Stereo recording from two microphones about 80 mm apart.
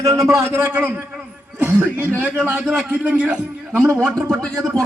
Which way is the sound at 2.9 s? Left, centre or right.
Right.